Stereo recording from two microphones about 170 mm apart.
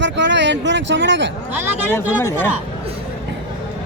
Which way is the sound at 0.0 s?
90° right.